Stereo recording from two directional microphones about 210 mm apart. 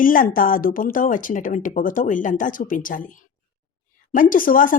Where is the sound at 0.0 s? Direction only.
40° left (ahead or behind).